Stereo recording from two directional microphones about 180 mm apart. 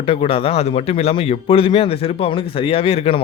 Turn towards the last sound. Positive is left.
turn(degrees=35)  # may be behind; listen again after turning